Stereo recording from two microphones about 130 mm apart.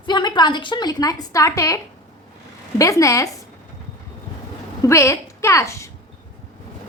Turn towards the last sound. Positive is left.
turn(degrees=25)  # may be behind; listen again after turning